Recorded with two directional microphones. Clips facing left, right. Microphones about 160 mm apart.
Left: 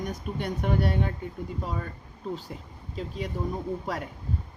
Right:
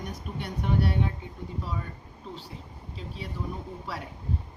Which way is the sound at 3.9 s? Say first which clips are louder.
Left 2 dB; 45° left (ahead or behind).